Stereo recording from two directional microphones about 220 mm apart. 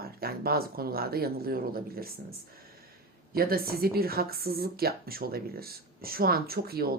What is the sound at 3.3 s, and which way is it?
A woman's voice, 45° right (ahead or behind).